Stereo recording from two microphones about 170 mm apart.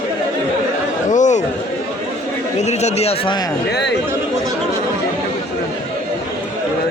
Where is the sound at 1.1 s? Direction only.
45° left (ahead or behind).